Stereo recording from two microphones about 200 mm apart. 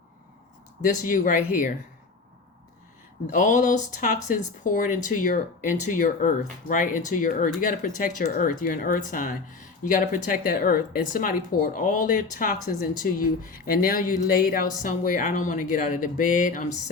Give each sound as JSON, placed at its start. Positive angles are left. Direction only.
{"t": 1.0, "sound": "speech", "side_deg": 45}
{"t": 3.2, "sound": "speech", "side_deg": 40}